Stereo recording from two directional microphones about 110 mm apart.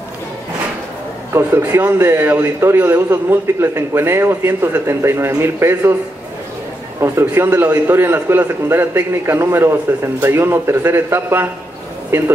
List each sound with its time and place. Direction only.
1.3 s a man's voice: 25° right (ahead or behind)
7.0 s a man's voice: 20° right (ahead or behind)